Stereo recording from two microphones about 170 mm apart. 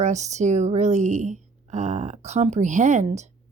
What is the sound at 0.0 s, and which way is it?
A woman's voice, 40° right (ahead or behind).